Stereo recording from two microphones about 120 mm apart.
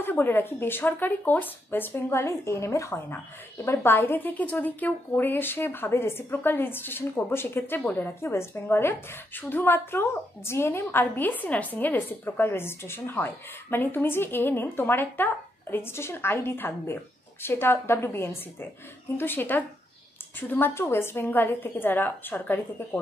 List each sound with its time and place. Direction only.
0.0 s speech: 15° left (ahead or behind)